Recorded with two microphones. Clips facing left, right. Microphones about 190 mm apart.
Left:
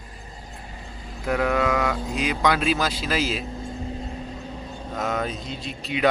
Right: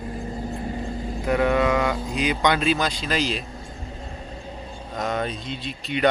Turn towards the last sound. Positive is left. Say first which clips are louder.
# right 1 dB
turn(degrees=0)  # may be behind; listen again after turning